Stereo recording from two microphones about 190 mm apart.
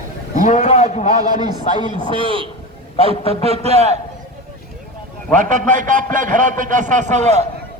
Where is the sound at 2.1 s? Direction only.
25° right (ahead or behind).